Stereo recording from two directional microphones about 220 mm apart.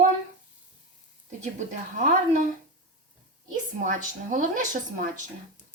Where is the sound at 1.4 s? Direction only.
35° right (ahead or behind).